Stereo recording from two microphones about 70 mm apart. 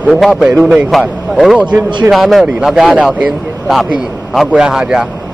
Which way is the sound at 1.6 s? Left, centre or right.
Centre.